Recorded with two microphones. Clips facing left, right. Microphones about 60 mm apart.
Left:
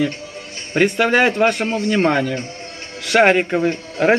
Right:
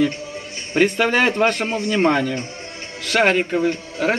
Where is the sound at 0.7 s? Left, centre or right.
Centre.